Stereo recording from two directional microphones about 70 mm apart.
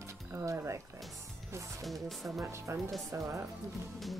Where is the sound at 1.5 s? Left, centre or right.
Right.